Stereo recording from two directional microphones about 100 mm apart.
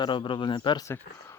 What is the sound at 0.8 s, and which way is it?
Speech, 30° left (ahead or behind).